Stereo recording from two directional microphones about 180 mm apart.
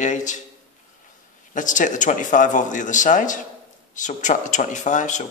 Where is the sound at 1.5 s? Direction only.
45° left (ahead or behind).